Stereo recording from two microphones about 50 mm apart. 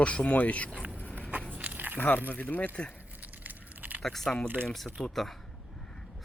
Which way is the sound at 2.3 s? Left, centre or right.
Left.